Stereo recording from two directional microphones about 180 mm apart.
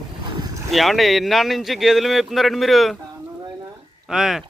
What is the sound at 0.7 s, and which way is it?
A man's voice, centre (ahead or behind).